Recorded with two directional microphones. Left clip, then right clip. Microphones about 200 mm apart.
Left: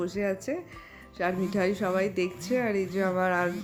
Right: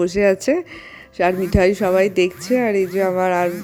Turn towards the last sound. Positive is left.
turn(degrees=-30)  # may be behind; listen again after turning